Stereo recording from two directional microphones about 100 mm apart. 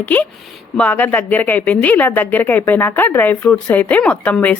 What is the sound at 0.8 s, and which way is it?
A woman's voice, 15° left (ahead or behind).